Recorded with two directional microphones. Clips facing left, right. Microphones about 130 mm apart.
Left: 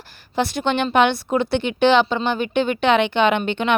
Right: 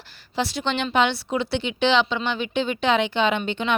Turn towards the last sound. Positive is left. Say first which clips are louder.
# left 4 dB
turn(degrees=60)  # may be behind; listen again after turning